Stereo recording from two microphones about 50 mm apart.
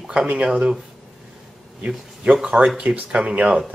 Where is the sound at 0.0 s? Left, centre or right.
Centre.